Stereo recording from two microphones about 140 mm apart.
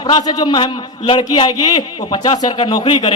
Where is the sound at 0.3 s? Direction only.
30° left (ahead or behind).